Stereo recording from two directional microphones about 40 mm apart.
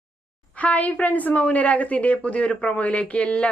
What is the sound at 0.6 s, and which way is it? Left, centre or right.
A woman's voice, left.